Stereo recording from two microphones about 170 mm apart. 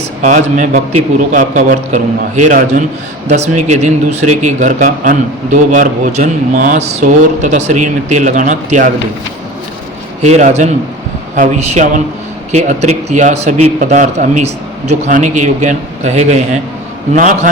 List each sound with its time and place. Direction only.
0.2 s speech: 45° right (ahead or behind)
10.2 s a man's voice: 40° right (ahead or behind)